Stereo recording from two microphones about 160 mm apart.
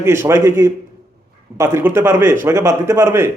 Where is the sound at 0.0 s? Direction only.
15° right (ahead or behind).